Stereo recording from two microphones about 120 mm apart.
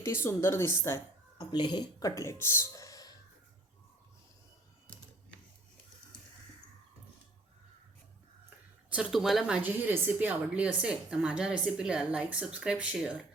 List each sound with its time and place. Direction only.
0.0 s a woman's voice: 20° left (ahead or behind)
1.4 s speech: 40° left (ahead or behind)
8.9 s speech: 5° right (ahead or behind)
9.6 s a woman's voice: 15° right (ahead or behind)